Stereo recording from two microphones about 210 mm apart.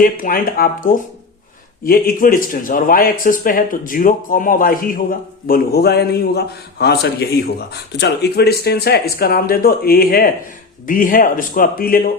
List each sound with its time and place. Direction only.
0.0 s a man's voice: 40° left (ahead or behind)